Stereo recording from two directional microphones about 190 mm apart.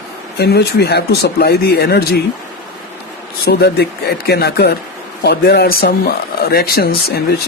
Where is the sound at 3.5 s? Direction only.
60° left (ahead or behind).